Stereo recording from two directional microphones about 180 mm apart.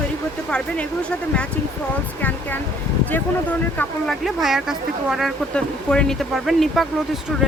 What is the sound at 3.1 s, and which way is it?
Speech, 10° left (ahead or behind).